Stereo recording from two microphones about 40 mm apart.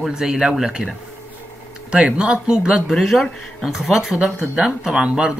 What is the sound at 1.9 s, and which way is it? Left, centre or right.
Speech, right.